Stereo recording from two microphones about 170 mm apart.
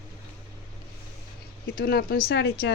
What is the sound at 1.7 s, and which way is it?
Speech, 60° left (ahead or behind).